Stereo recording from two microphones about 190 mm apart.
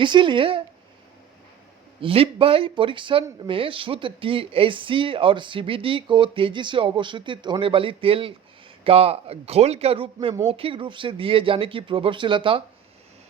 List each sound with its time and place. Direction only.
0.0 s speech: 25° right (ahead or behind)
2.0 s speech: 30° right (ahead or behind)